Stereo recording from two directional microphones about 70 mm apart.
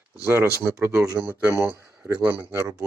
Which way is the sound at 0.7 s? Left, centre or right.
Right.